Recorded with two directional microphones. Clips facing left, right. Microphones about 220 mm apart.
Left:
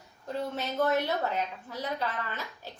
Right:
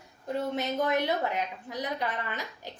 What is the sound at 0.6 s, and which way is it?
A woman's voice, 15° right (ahead or behind).